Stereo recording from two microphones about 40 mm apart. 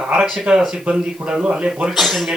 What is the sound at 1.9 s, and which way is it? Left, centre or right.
Speech, centre.